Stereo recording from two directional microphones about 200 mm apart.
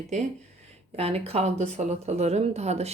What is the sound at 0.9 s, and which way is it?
Speech, 30° right (ahead or behind).